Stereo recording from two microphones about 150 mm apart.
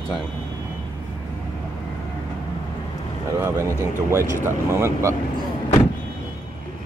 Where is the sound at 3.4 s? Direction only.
15° right (ahead or behind).